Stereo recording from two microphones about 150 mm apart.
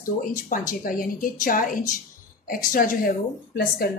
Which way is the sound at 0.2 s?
60° left (ahead or behind).